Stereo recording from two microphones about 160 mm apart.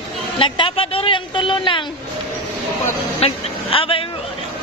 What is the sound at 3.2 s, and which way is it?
Speech, 35° left (ahead or behind).